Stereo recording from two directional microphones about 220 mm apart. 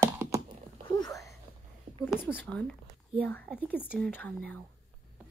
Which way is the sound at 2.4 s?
5° left (ahead or behind).